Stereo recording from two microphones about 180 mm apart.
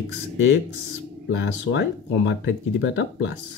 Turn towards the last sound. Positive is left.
turn(degrees=90)